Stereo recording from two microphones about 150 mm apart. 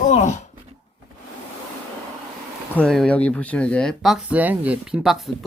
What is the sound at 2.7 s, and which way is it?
Speech, 5° left (ahead or behind).